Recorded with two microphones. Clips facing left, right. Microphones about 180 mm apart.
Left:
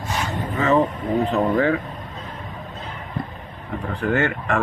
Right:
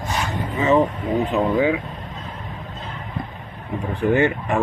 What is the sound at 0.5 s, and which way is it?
Speech, 15° right (ahead or behind).